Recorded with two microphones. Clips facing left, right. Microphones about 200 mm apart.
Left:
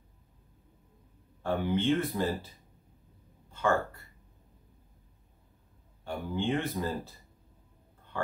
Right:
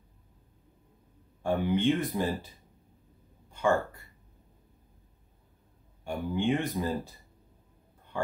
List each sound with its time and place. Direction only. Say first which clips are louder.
1.4 s speech: right 2 dB; 15° right (ahead or behind)
3.4 s a sound: right 2 dB; 15° right (ahead or behind)
6.0 s speech: right 3 dB; 15° right (ahead or behind)